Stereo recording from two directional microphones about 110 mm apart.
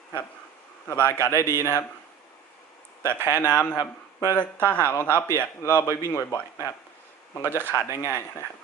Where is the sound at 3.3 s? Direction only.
30° left (ahead or behind).